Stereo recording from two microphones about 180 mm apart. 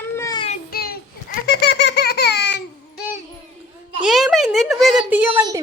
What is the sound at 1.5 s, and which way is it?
Baby laughter, 65° left (ahead or behind).